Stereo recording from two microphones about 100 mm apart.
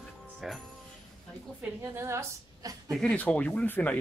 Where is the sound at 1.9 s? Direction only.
30° right (ahead or behind).